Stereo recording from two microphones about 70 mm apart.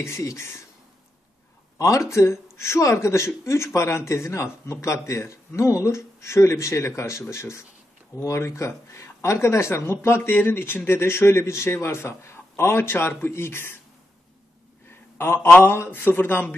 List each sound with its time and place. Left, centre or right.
0.0 s speech: left
1.8 s speech: left
15.1 s speech: left